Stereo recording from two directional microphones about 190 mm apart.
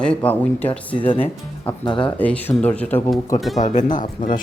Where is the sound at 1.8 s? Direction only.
25° left (ahead or behind).